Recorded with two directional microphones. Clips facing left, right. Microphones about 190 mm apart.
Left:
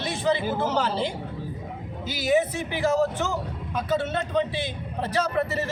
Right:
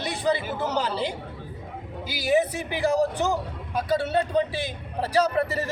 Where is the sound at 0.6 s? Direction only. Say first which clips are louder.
Left 1 dB; 15° right (ahead or behind).